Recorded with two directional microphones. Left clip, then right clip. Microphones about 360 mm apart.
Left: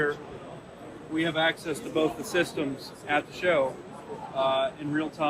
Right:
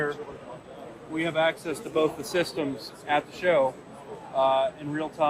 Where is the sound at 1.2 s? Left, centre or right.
Right.